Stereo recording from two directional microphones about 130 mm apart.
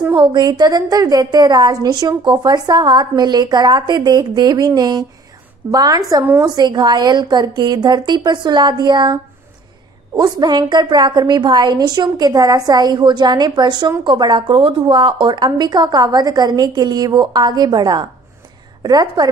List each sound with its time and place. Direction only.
0.1 s a woman's voice: 35° right (ahead or behind)